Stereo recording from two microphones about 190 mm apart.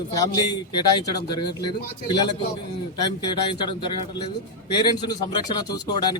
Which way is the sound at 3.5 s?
25° left (ahead or behind).